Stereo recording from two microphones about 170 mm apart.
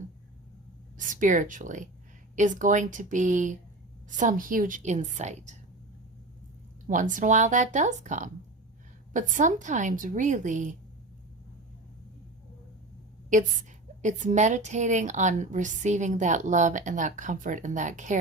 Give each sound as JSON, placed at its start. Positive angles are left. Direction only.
{"t": 0.9, "sound": "a woman's voice", "side_deg": -50}
{"t": 6.8, "sound": "a woman's voice", "side_deg": -50}
{"t": 13.3, "sound": "a woman's voice", "side_deg": -45}